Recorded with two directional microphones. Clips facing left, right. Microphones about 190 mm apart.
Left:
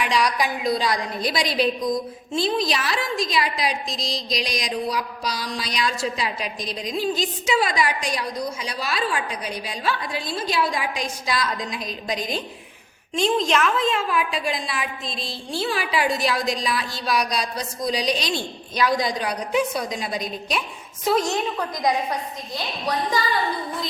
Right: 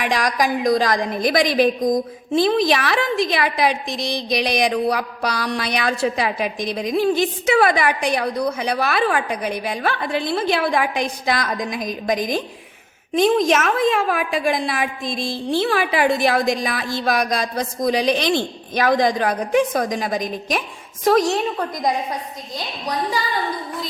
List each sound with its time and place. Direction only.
0.1 s a woman's voice: 45° right (ahead or behind)